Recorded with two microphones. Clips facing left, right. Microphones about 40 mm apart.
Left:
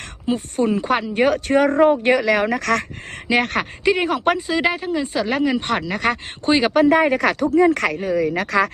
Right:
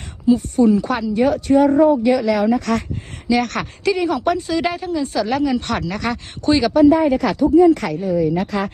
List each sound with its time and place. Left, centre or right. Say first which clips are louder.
0.3 s speech: right 6 dB; left
1.2 s speech: right 3 dB; left
3.2 s speech: even; left
4.6 s a woman's voice: left 1 dB; centre
5.3 s speech: left 1 dB; left
6.8 s speech: right 2 dB; left